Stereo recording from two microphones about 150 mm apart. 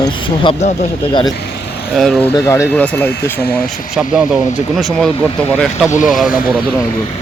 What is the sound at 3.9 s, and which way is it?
Speech, 5° right (ahead or behind).